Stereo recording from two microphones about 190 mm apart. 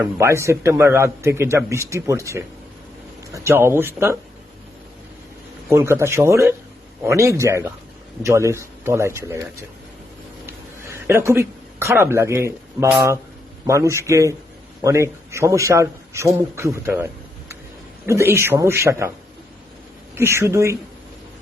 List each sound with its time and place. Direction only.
0.0 s a man's voice: 15° right (ahead or behind)
5.6 s a man's voice: 15° right (ahead or behind)
10.4 s a sound: 10° right (ahead or behind)
13.7 s a man's voice: 15° right (ahead or behind)
20.1 s a man's voice: 15° right (ahead or behind)